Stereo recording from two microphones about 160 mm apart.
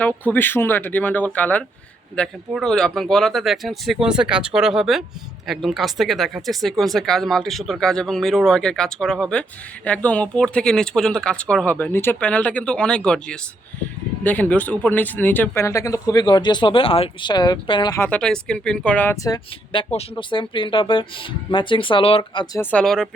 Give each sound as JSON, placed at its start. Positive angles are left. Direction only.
{"t": 0.0, "sound": "speech", "side_deg": 10}
{"t": 17.9, "sound": "speech", "side_deg": 10}
{"t": 19.1, "sound": "speech", "side_deg": 20}
{"t": 19.7, "sound": "speech", "side_deg": 35}
{"t": 22.6, "sound": "speech", "side_deg": 5}